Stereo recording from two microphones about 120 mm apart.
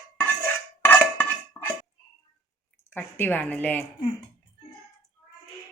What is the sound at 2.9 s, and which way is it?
Speech, 15° left (ahead or behind).